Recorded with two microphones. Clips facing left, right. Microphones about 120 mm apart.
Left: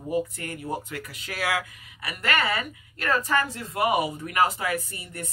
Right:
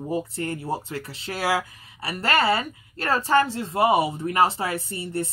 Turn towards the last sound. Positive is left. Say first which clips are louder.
# right 10 dB
turn(degrees=-30)  # may be behind; listen again after turning